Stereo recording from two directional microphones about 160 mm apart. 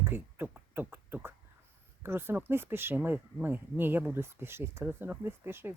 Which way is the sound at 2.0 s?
15° right (ahead or behind).